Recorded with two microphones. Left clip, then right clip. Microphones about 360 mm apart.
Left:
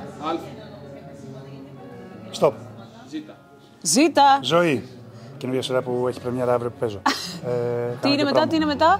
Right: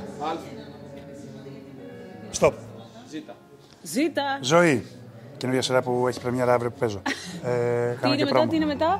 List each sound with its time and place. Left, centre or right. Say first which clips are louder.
3.8 s a woman's voice: left 10 dB; left
4.4 s a man's voice: even; right
7.0 s beatboxing: left 7 dB; centre
7.4 s a man's voice: right 1 dB; right
8.0 s speech: left 4 dB; centre